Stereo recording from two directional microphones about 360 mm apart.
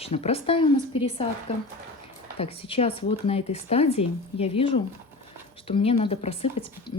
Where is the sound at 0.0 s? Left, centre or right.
Centre.